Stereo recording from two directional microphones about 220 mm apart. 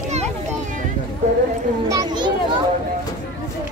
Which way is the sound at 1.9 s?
20° right (ahead or behind).